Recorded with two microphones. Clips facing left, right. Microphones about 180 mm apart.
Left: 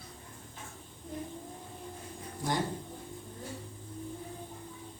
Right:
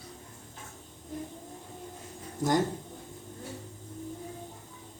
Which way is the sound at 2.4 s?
45° right (ahead or behind).